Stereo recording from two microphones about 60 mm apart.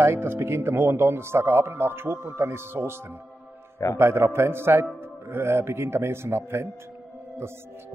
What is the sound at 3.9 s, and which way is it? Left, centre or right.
Speech, right.